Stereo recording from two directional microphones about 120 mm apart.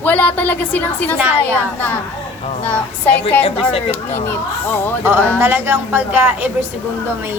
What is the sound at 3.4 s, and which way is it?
Speech, 55° left (ahead or behind).